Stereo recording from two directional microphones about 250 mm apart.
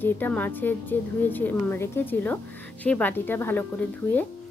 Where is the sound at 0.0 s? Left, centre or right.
Centre.